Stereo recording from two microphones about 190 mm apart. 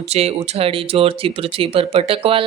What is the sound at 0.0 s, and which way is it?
A woman's voice, 35° right (ahead or behind).